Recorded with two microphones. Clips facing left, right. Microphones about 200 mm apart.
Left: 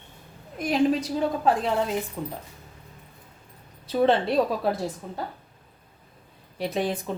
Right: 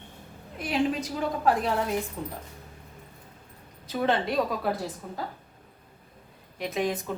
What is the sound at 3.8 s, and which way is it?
Speech, 30° left (ahead or behind).